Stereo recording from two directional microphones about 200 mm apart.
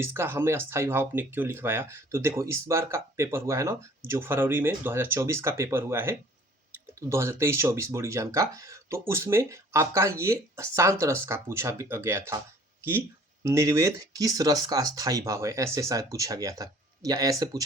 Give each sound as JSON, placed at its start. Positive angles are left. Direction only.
{"t": 0.0, "sound": "speech", "side_deg": -10}